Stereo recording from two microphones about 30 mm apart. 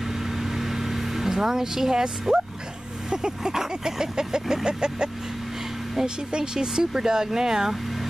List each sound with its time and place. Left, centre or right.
0.4 s vehicle: centre
3.1 s speech: right